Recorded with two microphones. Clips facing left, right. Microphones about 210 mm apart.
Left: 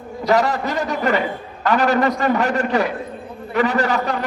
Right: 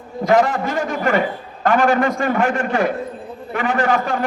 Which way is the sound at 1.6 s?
50° right (ahead or behind).